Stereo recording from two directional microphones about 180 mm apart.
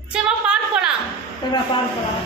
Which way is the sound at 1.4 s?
25° left (ahead or behind).